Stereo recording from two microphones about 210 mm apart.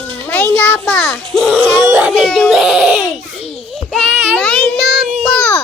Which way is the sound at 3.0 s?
30° left (ahead or behind).